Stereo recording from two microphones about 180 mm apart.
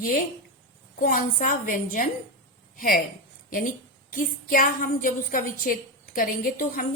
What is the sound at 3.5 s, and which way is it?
A woman's voice, 50° left (ahead or behind).